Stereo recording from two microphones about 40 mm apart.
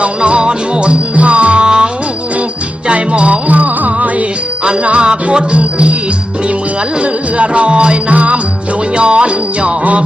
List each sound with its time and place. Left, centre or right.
0.2 s music: right
4.6 s jingle bell: right
7.0 s music: right
8.1 s music: right
9.0 s jingle bell: right